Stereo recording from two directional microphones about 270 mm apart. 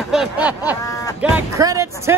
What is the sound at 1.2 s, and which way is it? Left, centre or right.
Speech, centre.